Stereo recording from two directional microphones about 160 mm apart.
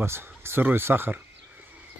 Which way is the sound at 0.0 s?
15° right (ahead or behind).